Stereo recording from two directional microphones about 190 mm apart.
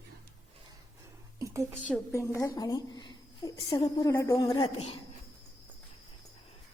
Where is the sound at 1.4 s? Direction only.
15° right (ahead or behind).